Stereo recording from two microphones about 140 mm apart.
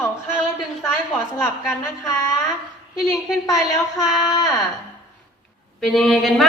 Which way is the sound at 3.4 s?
25° left (ahead or behind).